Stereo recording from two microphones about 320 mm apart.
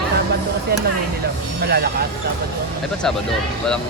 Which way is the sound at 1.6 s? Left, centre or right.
Right.